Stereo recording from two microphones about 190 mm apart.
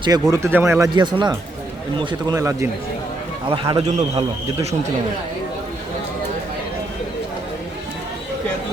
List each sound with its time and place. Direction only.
0.0 s speech: 20° right (ahead or behind)
3.5 s a man's voice: 25° right (ahead or behind)